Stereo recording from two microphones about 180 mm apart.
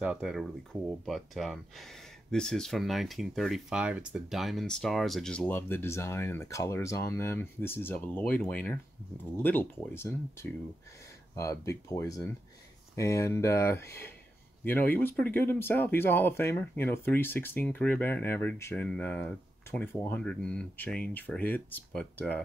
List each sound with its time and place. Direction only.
0.0 s speech: 5° right (ahead or behind)